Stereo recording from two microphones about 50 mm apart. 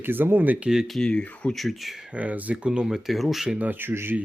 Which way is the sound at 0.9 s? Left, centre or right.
Centre.